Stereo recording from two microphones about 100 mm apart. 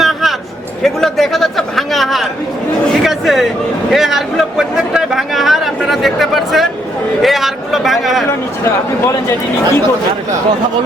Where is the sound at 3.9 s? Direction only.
Centre (ahead or behind).